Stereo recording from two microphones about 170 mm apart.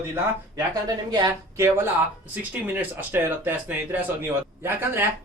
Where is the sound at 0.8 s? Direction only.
20° right (ahead or behind).